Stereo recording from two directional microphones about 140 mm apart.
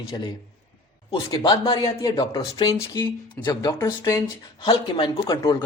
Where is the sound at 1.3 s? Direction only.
25° left (ahead or behind).